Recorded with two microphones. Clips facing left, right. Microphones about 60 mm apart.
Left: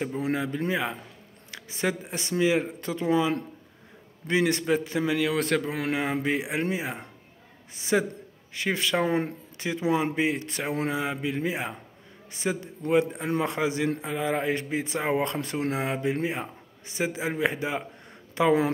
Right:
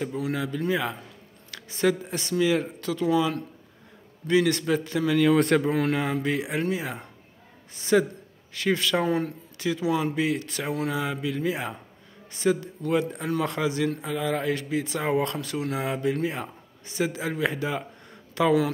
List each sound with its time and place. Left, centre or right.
0.0 s a man's voice: left
5.1 s speech: centre
5.9 s a man's voice: left